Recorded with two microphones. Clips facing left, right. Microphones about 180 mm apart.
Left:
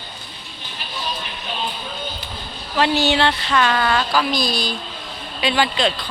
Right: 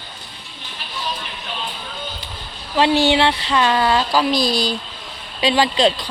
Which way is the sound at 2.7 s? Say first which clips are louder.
Right 3 dB; 25° right (ahead or behind).